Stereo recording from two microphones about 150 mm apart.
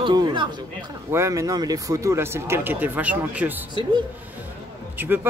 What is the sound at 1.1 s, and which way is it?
Speech, 20° right (ahead or behind).